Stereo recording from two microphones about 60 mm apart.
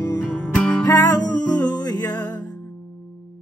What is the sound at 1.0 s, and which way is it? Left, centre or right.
Music, left.